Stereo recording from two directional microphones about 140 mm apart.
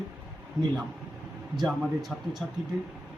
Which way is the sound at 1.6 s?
Centre (ahead or behind).